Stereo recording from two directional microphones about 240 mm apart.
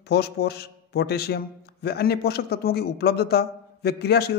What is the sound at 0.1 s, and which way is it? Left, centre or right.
A man's voice, left.